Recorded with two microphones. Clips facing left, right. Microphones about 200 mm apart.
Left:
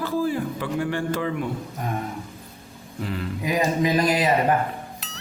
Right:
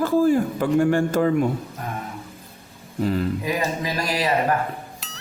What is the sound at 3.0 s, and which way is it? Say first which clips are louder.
Speech: right 7 dB; 40° right (ahead or behind).